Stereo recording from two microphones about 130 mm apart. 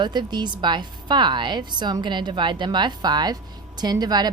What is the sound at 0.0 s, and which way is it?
A woman's voice, 35° right (ahead or behind).